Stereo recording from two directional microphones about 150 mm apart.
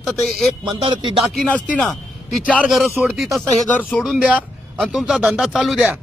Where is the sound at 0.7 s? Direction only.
35° right (ahead or behind).